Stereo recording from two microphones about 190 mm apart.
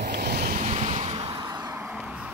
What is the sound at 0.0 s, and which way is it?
Waves, 60° right (ahead or behind).